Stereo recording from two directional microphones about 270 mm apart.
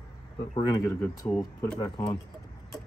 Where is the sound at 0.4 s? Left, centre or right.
Centre.